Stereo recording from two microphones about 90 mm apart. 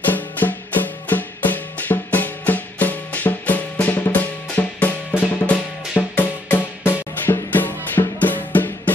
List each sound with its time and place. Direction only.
0.0 s music: 20° left (ahead or behind)